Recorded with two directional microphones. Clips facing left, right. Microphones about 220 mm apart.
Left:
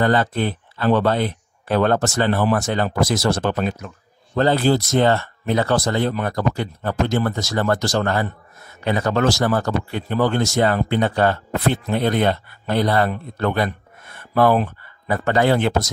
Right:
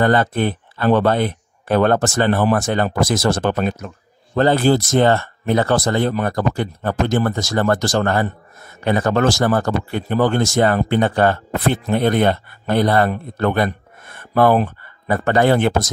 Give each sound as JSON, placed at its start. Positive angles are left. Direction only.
{"t": 0.0, "sound": "speech", "side_deg": -50}